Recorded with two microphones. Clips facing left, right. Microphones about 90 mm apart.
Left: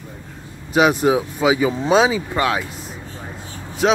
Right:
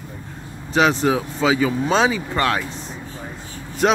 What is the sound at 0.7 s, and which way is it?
Speech, 10° left (ahead or behind).